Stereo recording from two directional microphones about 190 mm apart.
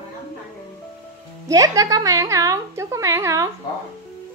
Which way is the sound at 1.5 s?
20° right (ahead or behind).